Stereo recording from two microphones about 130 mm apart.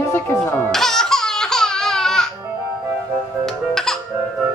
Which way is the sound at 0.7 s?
5° left (ahead or behind).